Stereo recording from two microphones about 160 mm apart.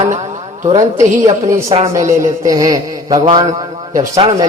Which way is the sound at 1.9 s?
20° right (ahead or behind).